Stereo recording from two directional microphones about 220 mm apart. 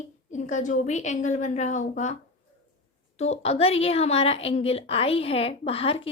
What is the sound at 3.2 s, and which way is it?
A woman's voice, 30° left (ahead or behind).